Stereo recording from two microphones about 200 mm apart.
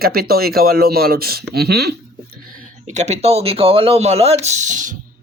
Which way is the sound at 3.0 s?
35° right (ahead or behind).